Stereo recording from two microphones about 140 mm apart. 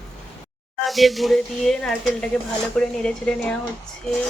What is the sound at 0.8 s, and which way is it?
Speech, centre (ahead or behind).